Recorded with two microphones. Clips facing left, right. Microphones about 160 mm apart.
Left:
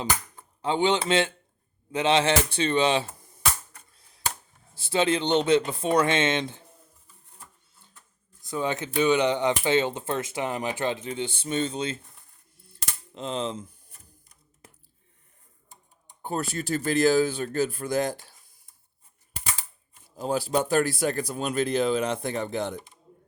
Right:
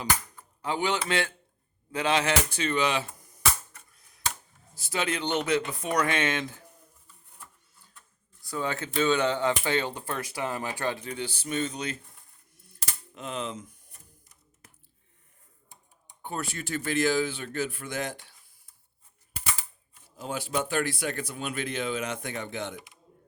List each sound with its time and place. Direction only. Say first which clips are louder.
0.0 s speech: left 1 dB; 25° left (ahead or behind)
3.8 s typewriter: left 1 dB; 30° left (ahead or behind)
4.7 s speech: left 7 dB; 30° left (ahead or behind)
8.4 s speech: left 3 dB; 20° left (ahead or behind)
12.7 s cap gun: left 2 dB; 30° left (ahead or behind)
16.2 s speech: left 5 dB; 40° left (ahead or behind)
20.1 s speech: left 6 dB; 35° left (ahead or behind)